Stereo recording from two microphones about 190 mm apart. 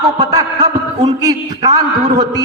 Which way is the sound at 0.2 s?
20° right (ahead or behind).